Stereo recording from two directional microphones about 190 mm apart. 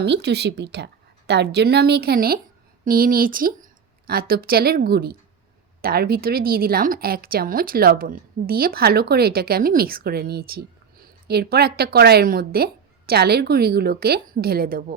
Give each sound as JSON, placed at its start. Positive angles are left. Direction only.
{"t": 0.0, "sound": "a woman's voice", "side_deg": -60}